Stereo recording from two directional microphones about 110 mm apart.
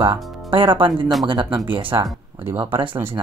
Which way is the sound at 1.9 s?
25° right (ahead or behind).